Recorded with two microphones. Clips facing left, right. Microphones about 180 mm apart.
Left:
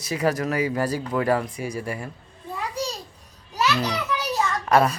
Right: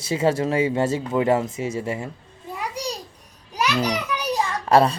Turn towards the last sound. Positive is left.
turn(degrees=-30)  # may be behind; listen again after turning